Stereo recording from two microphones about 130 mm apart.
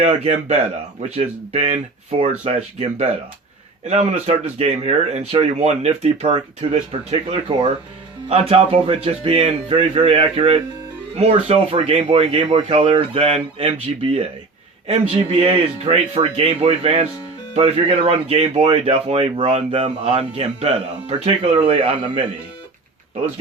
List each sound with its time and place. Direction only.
0.0 s speech: 60° right (ahead or behind)